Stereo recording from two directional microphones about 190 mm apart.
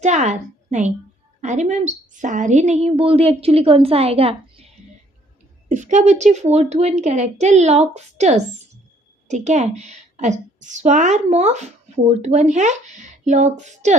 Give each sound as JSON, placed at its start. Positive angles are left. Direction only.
{"t": 0.0, "sound": "a woman's voice", "side_deg": -40}
{"t": 5.6, "sound": "a woman's voice", "side_deg": -40}